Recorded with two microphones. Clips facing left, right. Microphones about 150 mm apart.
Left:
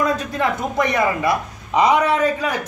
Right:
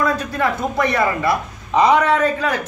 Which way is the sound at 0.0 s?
20° left (ahead or behind).